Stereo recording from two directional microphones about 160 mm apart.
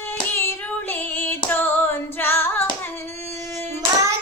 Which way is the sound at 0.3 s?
15° left (ahead or behind).